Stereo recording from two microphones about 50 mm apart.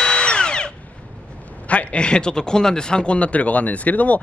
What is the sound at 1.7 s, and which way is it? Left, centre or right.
Speech, left.